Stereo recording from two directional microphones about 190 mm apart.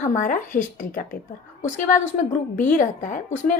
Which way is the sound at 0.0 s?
45° left (ahead or behind).